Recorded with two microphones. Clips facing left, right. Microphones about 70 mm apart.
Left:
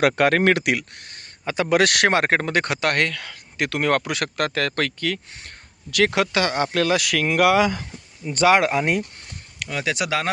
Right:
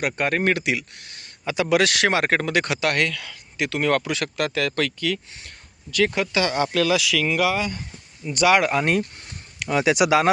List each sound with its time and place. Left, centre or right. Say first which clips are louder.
0.2 s speech: left 4 dB; left
1.0 s a sound: even; left
1.7 s speech: left 2 dB; left
5.9 s speech: left 2 dB; left
6.4 s speech: even; left
7.5 s speech: left 7 dB; left
8.3 s speech: left 1 dB; left
8.7 s speech: even; centre
9.6 s speech: right 6 dB; centre